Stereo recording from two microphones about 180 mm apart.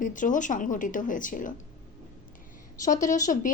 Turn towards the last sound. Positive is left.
turn(degrees=45)  # may be behind; listen again after turning